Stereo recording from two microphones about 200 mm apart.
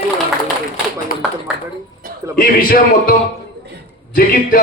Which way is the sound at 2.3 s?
45° left (ahead or behind).